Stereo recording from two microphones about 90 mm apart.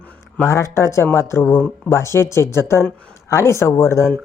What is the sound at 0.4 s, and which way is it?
Speech, 35° left (ahead or behind).